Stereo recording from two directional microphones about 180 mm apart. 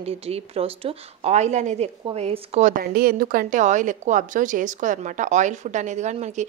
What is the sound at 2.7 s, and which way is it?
A woman's voice, 55° right (ahead or behind).